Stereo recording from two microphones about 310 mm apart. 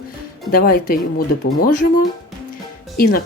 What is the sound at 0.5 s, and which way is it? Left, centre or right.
Speech, left.